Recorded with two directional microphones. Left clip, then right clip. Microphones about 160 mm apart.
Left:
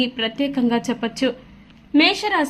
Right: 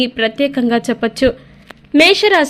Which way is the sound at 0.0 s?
25° right (ahead or behind).